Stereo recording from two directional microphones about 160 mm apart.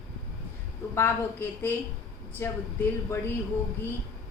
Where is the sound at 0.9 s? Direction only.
15° left (ahead or behind).